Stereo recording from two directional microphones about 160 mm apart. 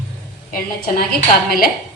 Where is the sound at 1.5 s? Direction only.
65° left (ahead or behind).